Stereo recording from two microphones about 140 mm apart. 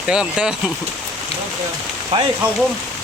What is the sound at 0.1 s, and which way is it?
Speech, 5° right (ahead or behind).